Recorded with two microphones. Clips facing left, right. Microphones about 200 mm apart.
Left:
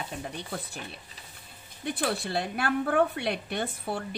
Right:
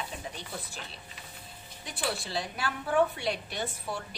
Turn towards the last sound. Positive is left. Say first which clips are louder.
# left 4 dB
turn(degrees=55)  # may be behind; listen again after turning